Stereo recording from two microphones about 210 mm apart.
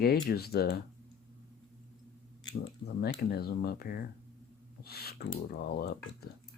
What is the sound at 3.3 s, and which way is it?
Speech, 50° left (ahead or behind).